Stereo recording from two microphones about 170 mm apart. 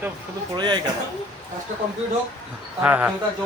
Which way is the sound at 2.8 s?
10° right (ahead or behind).